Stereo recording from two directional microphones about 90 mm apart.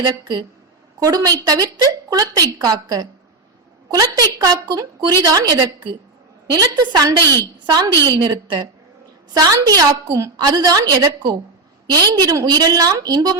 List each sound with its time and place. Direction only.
0.0 s a woman's voice: 45° right (ahead or behind)
8.1 s a woman's voice: 50° right (ahead or behind)